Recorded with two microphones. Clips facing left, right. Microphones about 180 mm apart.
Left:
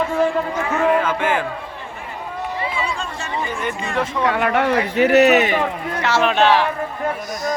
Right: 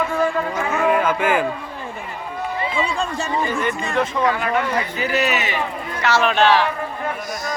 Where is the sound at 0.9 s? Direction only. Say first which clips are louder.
Right 1 dB; 10° right (ahead or behind).